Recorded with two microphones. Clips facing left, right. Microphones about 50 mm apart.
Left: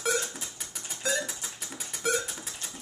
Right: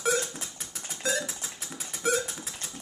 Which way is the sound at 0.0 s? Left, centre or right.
Centre.